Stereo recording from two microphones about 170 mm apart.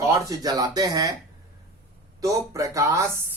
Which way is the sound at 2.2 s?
20° right (ahead or behind).